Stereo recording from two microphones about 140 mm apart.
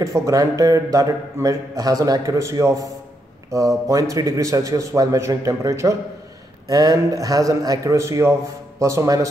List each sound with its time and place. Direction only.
0.0 s a man's voice: 25° right (ahead or behind)